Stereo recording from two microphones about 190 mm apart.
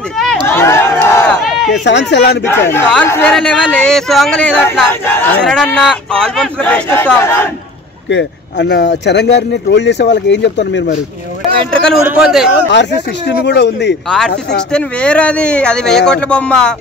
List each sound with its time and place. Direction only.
0.5 s crowd: 10° left (ahead or behind)
1.4 s a sound: centre (ahead or behind)
1.9 s speech: 65° left (ahead or behind)
2.4 s speech: 10° left (ahead or behind)
8.1 s speech: 70° left (ahead or behind)
12.0 s speech: 5° right (ahead or behind)
13.4 s speech: 60° left (ahead or behind)
14.0 s speech: centre (ahead or behind)